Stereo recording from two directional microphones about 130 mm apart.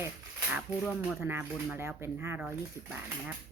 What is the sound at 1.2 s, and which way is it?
Speech, 15° right (ahead or behind).